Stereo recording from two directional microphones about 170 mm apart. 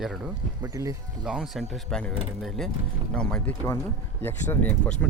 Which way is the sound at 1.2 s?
Centre (ahead or behind).